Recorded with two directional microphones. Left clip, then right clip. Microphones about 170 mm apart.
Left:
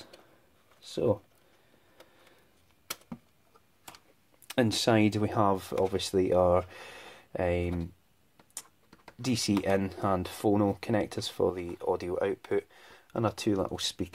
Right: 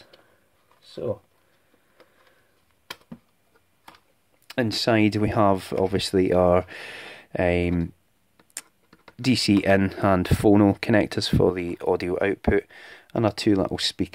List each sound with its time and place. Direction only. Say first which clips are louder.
4.5 s speech: right 4 dB; 10° right (ahead or behind); by 7.9 s 45° right (ahead or behind)
9.2 s speech: right 9 dB; 40° right (ahead or behind)